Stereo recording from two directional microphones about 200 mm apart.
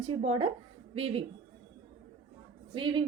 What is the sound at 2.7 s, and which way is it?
Speech, 25° right (ahead or behind).